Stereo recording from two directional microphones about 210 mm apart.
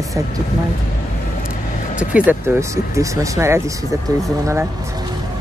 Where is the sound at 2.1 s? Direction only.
10° right (ahead or behind).